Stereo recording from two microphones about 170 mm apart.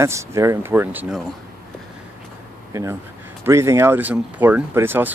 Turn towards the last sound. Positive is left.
turn(degrees=-10)  # may be behind; listen again after turning